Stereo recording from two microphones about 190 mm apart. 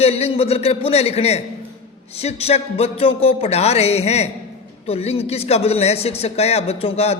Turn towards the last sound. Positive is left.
turn(degrees=35)  # may be behind; listen again after turning